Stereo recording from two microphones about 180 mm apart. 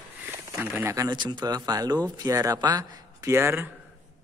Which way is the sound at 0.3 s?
15° right (ahead or behind).